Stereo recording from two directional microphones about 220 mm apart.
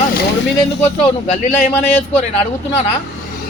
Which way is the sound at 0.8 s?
30° left (ahead or behind).